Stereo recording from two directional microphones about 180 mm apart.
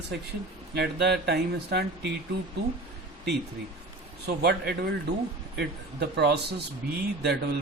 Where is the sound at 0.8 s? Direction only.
70° right (ahead or behind).